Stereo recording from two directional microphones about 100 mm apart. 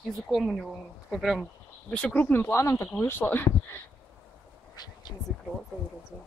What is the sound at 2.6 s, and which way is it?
Speech, 30° left (ahead or behind).